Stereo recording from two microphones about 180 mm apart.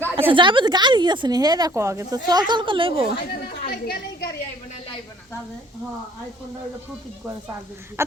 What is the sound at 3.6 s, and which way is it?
Speech, 60° left (ahead or behind).